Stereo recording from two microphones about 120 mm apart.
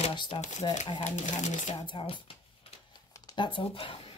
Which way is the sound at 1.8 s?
45° left (ahead or behind).